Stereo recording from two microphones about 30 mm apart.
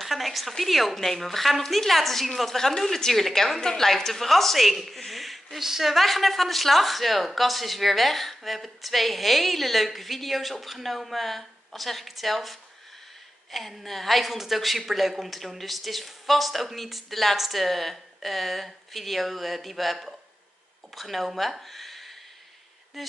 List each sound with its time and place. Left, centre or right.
0.0 s a woman's voice: centre
2.5 s speech: centre
3.6 s speech: centre
5.6 s a woman's voice: centre
6.0 s a woman's voice: centre